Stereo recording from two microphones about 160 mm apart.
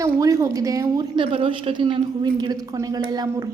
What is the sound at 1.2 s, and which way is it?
A woman's voice, 35° right (ahead or behind).